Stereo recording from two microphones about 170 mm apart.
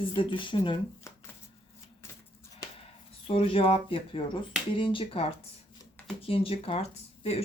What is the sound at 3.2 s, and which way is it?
Speech, 30° left (ahead or behind).